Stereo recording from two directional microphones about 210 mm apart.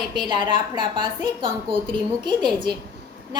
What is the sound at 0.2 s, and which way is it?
A woman's voice, 20° right (ahead or behind).